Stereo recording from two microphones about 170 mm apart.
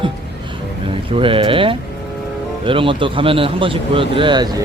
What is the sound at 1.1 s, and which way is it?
Speech, 30° right (ahead or behind).